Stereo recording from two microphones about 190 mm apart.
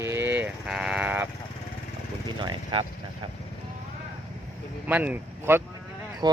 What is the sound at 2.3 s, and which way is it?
Vehicle, 25° right (ahead or behind).